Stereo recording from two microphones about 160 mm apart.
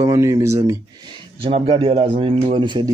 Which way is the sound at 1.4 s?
35° right (ahead or behind).